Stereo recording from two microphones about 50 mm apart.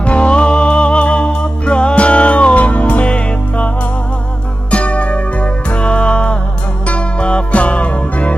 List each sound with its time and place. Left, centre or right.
0.0 s music: left